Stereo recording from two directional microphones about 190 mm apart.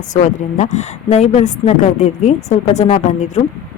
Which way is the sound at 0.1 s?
40° left (ahead or behind).